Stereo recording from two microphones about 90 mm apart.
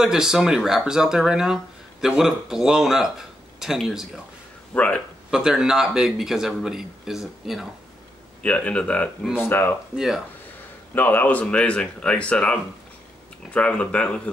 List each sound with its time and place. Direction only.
0.0 s speech: 5° right (ahead or behind)
4.7 s speech: 15° left (ahead or behind)
5.3 s speech: 10° right (ahead or behind)
8.4 s speech: 15° left (ahead or behind)
9.9 s speech: 5° right (ahead or behind)
11.0 s speech: 20° left (ahead or behind)